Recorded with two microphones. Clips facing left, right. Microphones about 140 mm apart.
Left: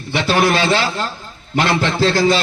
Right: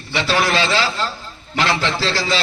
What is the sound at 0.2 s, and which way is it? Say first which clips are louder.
A man's voice: left 3 dB; 50° left (ahead or behind).